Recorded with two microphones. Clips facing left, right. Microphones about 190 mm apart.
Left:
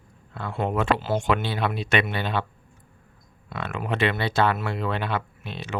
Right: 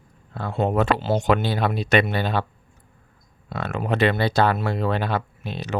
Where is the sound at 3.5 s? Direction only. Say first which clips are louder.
Right 4 dB; 40° right (ahead or behind).